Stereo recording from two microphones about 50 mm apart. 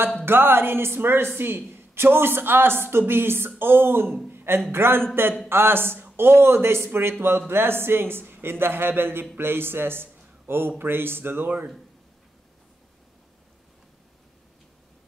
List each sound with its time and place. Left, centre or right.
0.2 s a woman's voice: right